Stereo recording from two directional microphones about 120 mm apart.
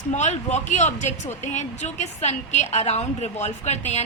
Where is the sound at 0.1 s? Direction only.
75° left (ahead or behind).